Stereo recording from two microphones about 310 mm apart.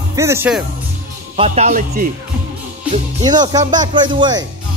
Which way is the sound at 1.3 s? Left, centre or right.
Centre.